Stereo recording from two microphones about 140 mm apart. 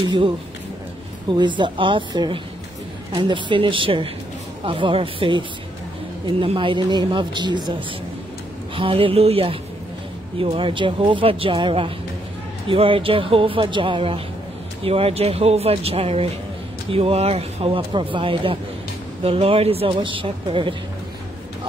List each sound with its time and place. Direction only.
1.3 s a man's voice: 35° right (ahead or behind)
8.7 s a man's voice: 40° right (ahead or behind)